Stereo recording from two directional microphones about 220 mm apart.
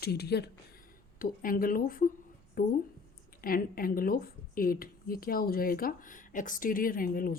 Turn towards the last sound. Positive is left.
turn(degrees=40)  # may be behind; listen again after turning